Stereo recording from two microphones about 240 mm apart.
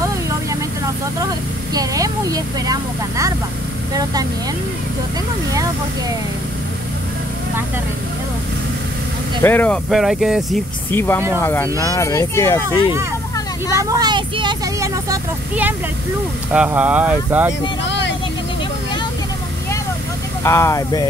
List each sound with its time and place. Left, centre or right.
1.2 s speech: centre
5.5 s speech: centre
9.4 s speech: centre
10.9 s speech: centre
13.7 s speech: centre
17.8 s vehicle: left
20.4 s speech: centre